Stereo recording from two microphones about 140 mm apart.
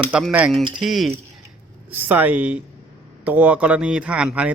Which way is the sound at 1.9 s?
15° right (ahead or behind).